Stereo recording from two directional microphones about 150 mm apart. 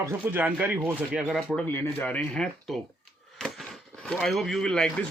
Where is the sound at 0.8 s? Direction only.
Centre (ahead or behind).